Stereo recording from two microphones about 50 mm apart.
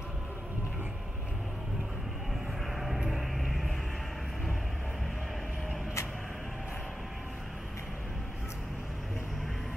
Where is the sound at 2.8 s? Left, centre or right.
Centre.